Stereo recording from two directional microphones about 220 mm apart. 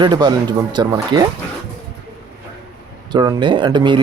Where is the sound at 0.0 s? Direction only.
20° right (ahead or behind).